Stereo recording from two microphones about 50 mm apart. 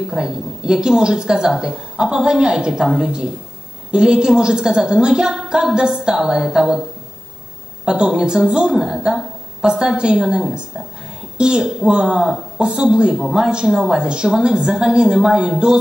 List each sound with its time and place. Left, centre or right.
0.1 s speech: centre
7.8 s speech: centre